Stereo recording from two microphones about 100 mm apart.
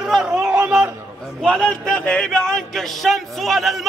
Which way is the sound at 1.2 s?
5° left (ahead or behind).